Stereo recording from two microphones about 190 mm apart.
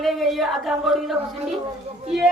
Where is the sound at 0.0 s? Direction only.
Centre (ahead or behind).